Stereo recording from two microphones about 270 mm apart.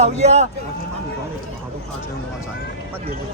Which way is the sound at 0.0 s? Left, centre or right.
Right.